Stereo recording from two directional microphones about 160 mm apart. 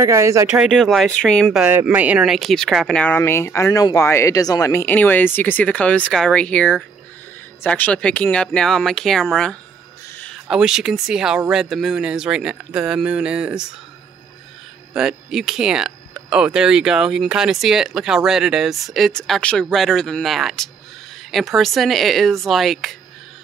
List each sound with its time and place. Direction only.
0.0 s speech: 20° right (ahead or behind)
0.5 s speech: 5° right (ahead or behind)
1.6 s speech: 10° right (ahead or behind)
10.1 s a sound: 10° left (ahead or behind)
10.5 s speech: 5° right (ahead or behind)
15.0 s speech: 5° right (ahead or behind)